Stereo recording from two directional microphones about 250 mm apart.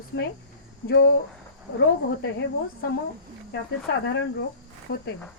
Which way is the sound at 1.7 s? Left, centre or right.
Left.